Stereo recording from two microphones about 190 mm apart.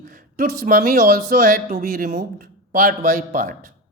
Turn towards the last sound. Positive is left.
turn(degrees=-45)  # may be behind; listen again after turning